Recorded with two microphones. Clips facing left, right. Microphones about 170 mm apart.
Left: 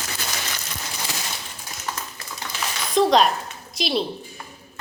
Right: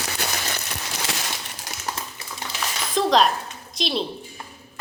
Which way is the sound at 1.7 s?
90° right.